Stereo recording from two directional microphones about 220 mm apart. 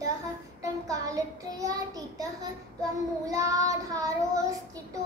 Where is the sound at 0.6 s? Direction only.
15° right (ahead or behind).